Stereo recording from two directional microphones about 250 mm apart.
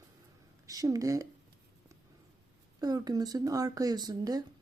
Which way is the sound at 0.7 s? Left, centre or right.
Centre.